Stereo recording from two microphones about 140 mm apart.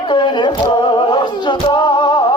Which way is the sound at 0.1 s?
35° left (ahead or behind).